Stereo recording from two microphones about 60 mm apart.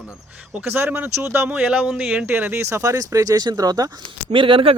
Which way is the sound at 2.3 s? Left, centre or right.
Right.